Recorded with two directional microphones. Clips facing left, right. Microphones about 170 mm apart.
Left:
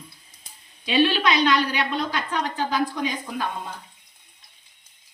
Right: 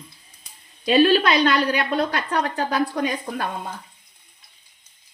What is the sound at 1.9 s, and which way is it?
A woman's voice, 65° right (ahead or behind).